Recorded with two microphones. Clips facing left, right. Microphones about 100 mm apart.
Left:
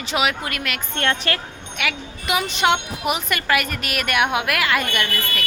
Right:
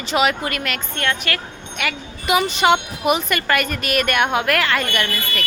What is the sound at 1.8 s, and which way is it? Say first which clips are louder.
Speech: right 1 dB; centre (ahead or behind).